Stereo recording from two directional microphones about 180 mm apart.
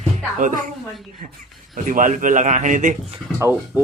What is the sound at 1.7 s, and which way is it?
Speech, 45° right (ahead or behind).